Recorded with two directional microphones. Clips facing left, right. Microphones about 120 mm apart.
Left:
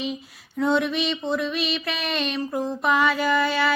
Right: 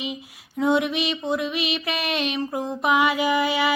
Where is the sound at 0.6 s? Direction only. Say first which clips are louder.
Right 1 dB; 10° right (ahead or behind).